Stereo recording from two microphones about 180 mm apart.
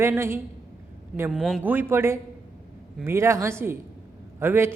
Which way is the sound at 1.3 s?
Centre (ahead or behind).